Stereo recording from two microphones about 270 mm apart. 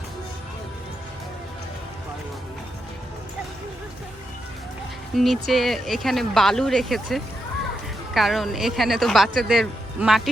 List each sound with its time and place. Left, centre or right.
5.1 s speech: centre